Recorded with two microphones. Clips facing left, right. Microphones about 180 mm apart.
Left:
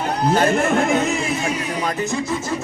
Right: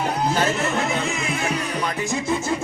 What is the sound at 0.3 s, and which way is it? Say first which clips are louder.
Music: left 5 dB; 55° left (ahead or behind).